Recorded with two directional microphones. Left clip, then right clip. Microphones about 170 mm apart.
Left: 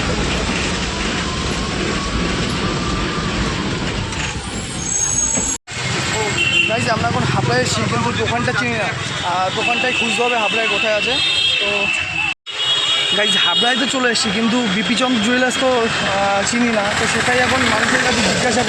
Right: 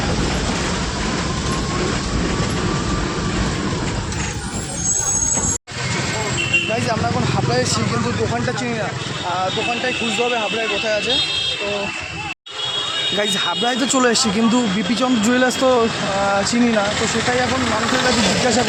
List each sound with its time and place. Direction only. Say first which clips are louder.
13.1 s speech: left 4 dB; 10° right (ahead or behind)
13.9 s speech: right 1 dB; 25° right (ahead or behind)
14.9 s speech: even; 15° right (ahead or behind)